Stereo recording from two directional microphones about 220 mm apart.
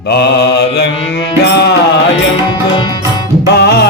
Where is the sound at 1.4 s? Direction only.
50° left (ahead or behind).